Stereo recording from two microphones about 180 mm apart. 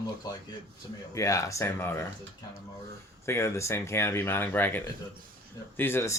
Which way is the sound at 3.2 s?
15° left (ahead or behind).